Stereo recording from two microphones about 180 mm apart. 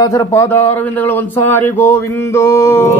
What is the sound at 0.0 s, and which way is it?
Speech, 20° left (ahead or behind).